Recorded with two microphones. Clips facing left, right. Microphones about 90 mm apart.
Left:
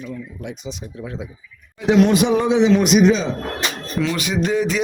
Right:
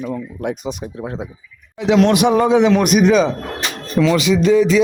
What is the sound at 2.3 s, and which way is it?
Speech, 45° right (ahead or behind).